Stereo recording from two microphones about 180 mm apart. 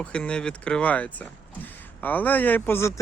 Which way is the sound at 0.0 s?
5° left (ahead or behind).